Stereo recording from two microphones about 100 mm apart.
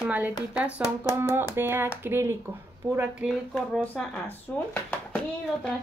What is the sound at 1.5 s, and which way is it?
Speech, 20° right (ahead or behind).